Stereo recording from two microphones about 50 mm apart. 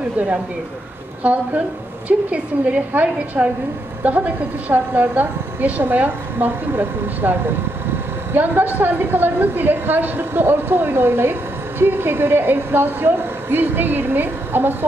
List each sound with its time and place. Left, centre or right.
1.2 s a woman's voice: right